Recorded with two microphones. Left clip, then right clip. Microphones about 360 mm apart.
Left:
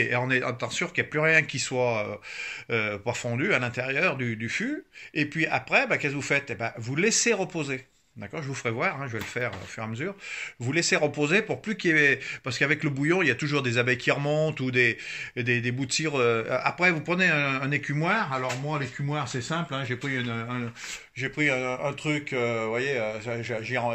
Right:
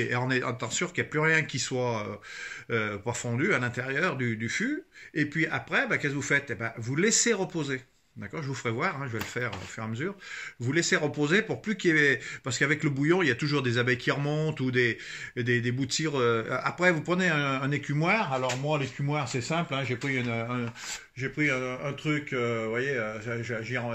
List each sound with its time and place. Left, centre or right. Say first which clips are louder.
0.0 s speech: left 3 dB; centre
21.2 s speech: left 3 dB; centre